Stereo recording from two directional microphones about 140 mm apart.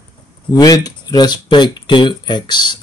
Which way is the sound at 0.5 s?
25° left (ahead or behind).